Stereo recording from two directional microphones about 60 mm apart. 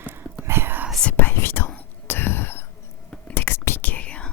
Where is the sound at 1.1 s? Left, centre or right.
Left.